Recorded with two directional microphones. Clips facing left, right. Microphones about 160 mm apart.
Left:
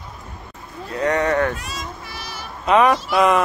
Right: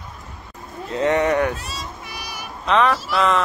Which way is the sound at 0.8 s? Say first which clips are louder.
Right 1 dB; 25° right (ahead or behind).